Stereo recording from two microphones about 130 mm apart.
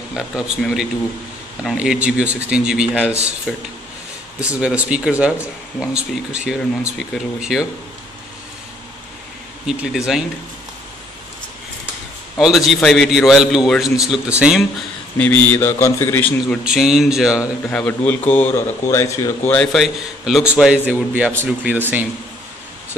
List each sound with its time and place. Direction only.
0.1 s speech: 5° right (ahead or behind)
6.3 s speech: 5° right (ahead or behind)
9.7 s speech: 5° right (ahead or behind)
12.4 s speech: 5° right (ahead or behind)
15.1 s speech: 10° left (ahead or behind)
16.6 s speech: 5° right (ahead or behind)
17.6 s speech: 10° left (ahead or behind)
19.5 s speech: 5° left (ahead or behind)
19.8 s speech: 5° right (ahead or behind)